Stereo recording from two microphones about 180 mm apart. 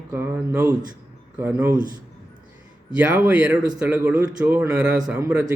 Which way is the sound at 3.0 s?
10° right (ahead or behind).